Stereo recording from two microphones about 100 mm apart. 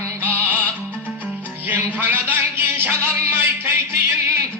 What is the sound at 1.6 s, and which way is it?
Music, 20° right (ahead or behind).